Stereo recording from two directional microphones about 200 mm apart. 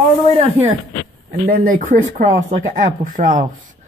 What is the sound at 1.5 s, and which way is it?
A man's voice, 45° right (ahead or behind).